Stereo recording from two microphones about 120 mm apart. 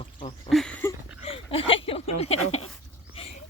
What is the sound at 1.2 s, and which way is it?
Speech, 50° left (ahead or behind).